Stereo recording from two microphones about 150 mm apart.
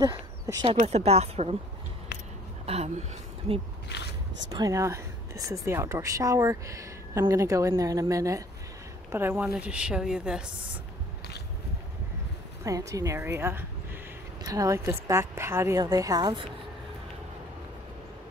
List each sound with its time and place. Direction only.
0.7 s a woman's voice: 45° right (ahead or behind)
2.6 s speech: 45° right (ahead or behind)
3.9 s speech: 90° left
4.5 s a woman's voice: 25° right (ahead or behind); by 10.5 s 5° right (ahead or behind)
12.6 s a woman's voice: 20° right (ahead or behind)